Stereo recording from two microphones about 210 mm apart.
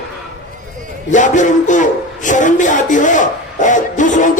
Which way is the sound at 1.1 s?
35° left (ahead or behind).